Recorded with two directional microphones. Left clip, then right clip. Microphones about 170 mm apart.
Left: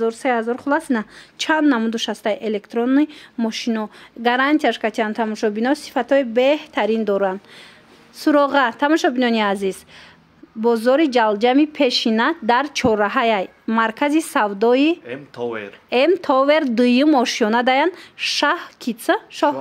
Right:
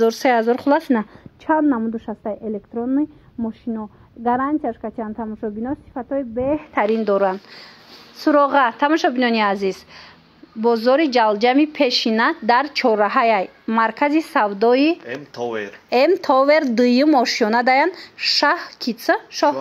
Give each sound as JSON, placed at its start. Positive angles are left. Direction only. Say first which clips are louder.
{"t": 0.0, "sound": "speech", "louder": "right 4 dB", "side_deg": -20}
{"t": 1.5, "sound": "a woman's voice", "louder": "even", "side_deg": 30}
{"t": 4.6, "sound": "a woman's voice", "louder": "left 6 dB", "side_deg": 30}
{"t": 6.7, "sound": "a woman's voice", "louder": "right 1 dB", "side_deg": 20}
{"t": 15.0, "sound": "speech", "louder": "even", "side_deg": 45}
{"t": 16.1, "sound": "a woman's voice", "louder": "even", "side_deg": 15}